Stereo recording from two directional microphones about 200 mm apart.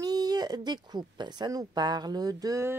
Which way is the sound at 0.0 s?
20° right (ahead or behind).